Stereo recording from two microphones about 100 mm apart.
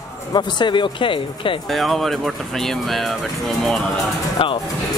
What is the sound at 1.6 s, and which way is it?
Speech, centre (ahead or behind).